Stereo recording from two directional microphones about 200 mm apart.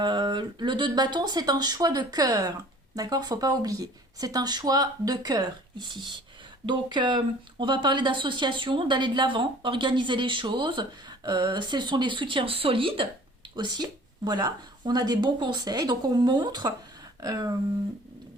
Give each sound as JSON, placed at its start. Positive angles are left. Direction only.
{"t": 0.0, "sound": "speech", "side_deg": -25}